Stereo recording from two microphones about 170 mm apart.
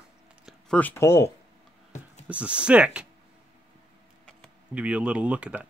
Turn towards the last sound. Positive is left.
turn(degrees=-5)  # may be behind; listen again after turning